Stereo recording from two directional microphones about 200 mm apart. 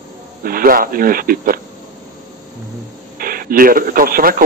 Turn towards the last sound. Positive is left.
turn(degrees=-45)  # may be behind; listen again after turning